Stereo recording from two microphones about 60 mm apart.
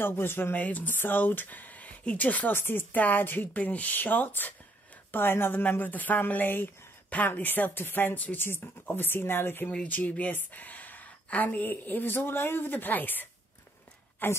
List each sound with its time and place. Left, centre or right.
0.0 s speech: left
9.8 s speech: left